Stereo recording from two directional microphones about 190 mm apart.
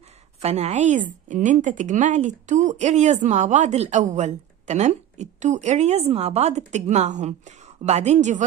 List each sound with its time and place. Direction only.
0.4 s a woman's voice: 35° right (ahead or behind)